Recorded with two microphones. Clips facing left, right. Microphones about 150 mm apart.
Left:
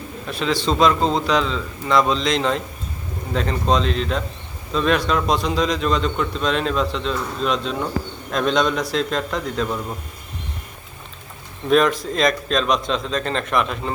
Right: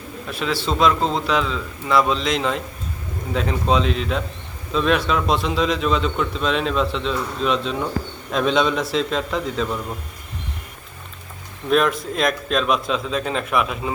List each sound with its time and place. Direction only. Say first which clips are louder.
0.3 s a man's voice: left 2 dB; 5° right (ahead or behind)
11.7 s a man's voice: left 2 dB; centre (ahead or behind)